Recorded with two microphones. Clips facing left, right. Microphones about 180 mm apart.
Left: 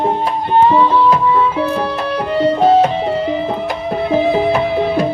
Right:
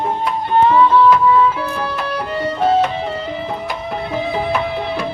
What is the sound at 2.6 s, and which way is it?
Music, 30° left (ahead or behind).